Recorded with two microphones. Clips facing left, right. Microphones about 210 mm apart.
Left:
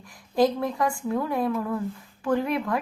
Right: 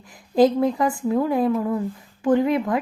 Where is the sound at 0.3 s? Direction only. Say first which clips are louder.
Right 5 dB; 25° right (ahead or behind).